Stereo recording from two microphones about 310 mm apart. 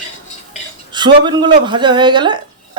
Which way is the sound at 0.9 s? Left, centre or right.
Centre.